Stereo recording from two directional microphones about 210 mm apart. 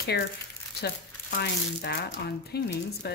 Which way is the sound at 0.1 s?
50° left (ahead or behind).